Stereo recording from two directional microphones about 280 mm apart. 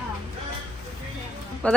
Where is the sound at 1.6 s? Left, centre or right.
Centre.